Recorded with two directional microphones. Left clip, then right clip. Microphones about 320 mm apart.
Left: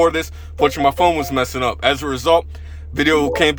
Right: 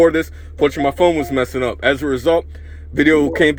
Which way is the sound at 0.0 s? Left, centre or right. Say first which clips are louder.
Right 3 dB; centre.